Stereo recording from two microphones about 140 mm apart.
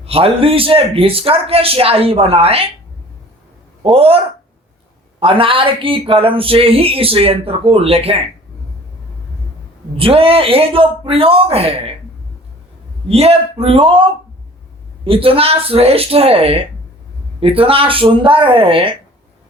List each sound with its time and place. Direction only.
0.0 s a man's voice: 45° right (ahead or behind)
3.8 s a man's voice: 45° right (ahead or behind)
5.2 s speech: 40° right (ahead or behind)
10.0 s speech: 40° right (ahead or behind)
13.1 s a man's voice: 45° right (ahead or behind)